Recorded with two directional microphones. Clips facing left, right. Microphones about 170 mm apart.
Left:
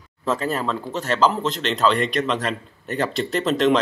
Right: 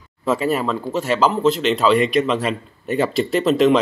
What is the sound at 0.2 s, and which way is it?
Speech, 5° right (ahead or behind).